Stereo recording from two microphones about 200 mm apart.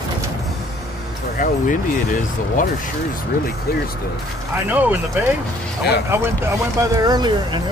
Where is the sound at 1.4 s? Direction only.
40° left (ahead or behind).